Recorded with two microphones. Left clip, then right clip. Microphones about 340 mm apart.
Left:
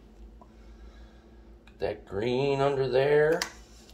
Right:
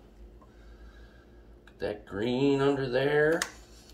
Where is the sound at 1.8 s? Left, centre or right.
Left.